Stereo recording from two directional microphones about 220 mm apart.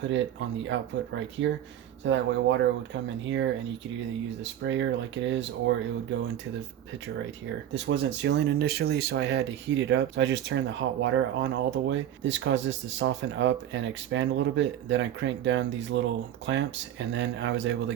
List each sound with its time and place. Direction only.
0.0 s speech: 55° right (ahead or behind)
4.6 s speech: 55° right (ahead or behind)
7.7 s speech: 55° right (ahead or behind)